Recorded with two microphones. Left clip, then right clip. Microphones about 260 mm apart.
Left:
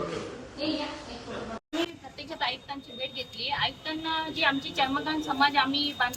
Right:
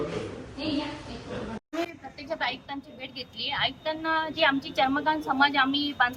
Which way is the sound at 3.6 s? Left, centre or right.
Centre.